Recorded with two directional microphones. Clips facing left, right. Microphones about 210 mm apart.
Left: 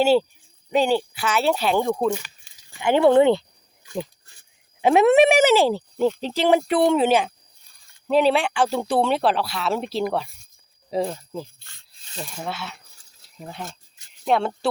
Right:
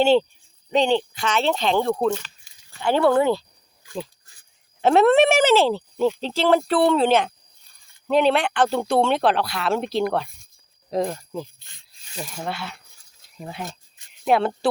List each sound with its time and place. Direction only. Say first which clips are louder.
0.0 s speech: right 1 dB; 5° left (ahead or behind); by 3.4 s 25° left (ahead or behind)
4.8 s speech: even; 15° left (ahead or behind)
12.1 s speech: right 1 dB; 5° right (ahead or behind)